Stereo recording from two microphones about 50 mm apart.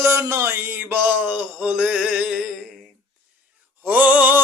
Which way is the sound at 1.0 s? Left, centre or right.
Right.